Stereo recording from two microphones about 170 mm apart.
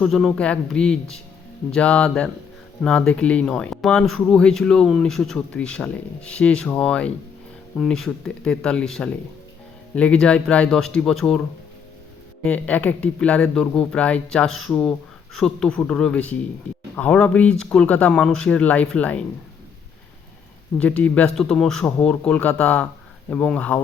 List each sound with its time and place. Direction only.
0.0 s speech: centre (ahead or behind)
12.5 s speech: 10° left (ahead or behind)
20.7 s speech: 10° left (ahead or behind)